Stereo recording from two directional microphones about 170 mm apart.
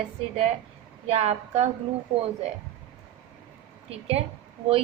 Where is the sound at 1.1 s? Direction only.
35° right (ahead or behind).